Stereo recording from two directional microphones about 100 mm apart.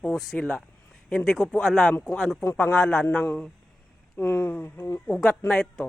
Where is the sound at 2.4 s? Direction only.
20° left (ahead or behind).